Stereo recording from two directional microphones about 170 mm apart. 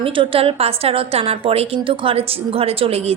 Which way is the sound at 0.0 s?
30° right (ahead or behind).